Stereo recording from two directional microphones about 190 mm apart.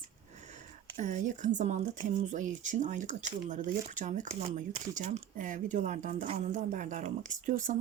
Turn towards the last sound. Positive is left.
turn(degrees=-40)  # may be behind; listen again after turning